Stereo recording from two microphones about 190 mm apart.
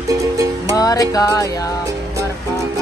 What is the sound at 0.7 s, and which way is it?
Music, 20° left (ahead or behind).